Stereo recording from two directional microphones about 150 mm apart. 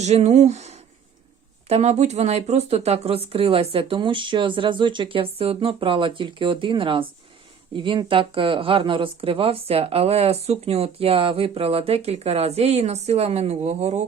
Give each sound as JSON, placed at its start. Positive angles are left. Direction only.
{"t": 0.0, "sound": "speech", "side_deg": -50}